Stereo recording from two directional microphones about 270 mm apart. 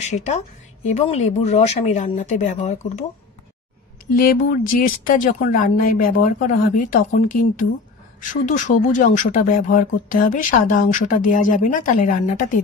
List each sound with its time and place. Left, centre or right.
0.0 s speech: left
4.1 s a woman's voice: left